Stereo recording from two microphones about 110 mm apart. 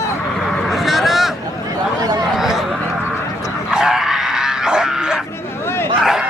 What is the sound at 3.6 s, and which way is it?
Dog, 5° right (ahead or behind).